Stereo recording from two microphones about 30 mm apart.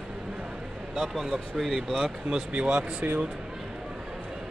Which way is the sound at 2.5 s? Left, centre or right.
Right.